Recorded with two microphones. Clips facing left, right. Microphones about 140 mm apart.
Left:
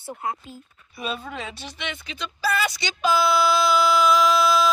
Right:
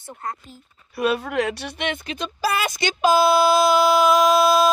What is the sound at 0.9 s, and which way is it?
A woman's voice, 75° right (ahead or behind).